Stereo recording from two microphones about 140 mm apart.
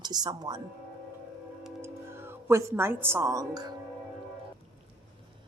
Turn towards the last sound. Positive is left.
turn(degrees=-25)  # may be behind; listen again after turning